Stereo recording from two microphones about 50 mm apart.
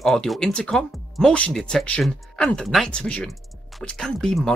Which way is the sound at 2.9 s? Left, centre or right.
Left.